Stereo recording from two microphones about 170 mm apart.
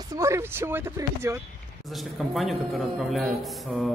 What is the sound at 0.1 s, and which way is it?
Speech, 15° right (ahead or behind).